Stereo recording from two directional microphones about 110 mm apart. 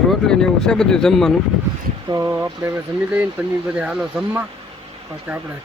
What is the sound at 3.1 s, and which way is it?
Speech, 15° right (ahead or behind).